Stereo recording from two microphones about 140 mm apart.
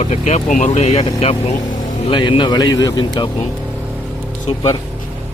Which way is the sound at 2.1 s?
35° left (ahead or behind).